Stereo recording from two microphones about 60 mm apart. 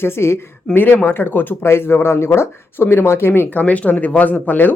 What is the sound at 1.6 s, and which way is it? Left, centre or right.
Speech, left.